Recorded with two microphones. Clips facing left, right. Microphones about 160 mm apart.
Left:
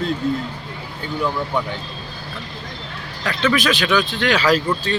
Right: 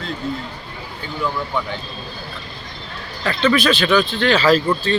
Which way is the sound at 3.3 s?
10° left (ahead or behind).